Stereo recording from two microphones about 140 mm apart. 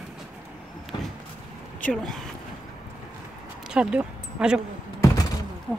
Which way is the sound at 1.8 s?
5° left (ahead or behind).